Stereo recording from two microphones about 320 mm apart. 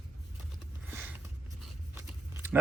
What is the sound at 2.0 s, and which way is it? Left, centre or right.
Biting, centre.